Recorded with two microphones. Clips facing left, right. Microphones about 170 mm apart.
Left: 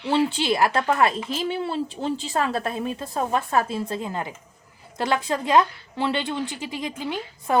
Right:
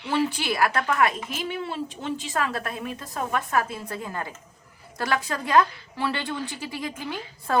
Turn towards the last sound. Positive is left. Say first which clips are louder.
# left 3 dB
turn(degrees=20)  # may be behind; listen again after turning